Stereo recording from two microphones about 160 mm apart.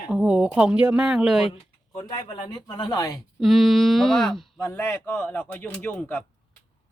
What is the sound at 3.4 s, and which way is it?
Speech, centre (ahead or behind).